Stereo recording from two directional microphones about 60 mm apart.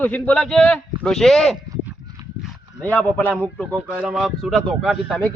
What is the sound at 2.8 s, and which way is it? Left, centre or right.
Speech, left.